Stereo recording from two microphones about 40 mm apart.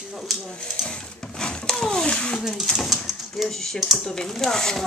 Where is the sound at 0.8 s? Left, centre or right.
Left.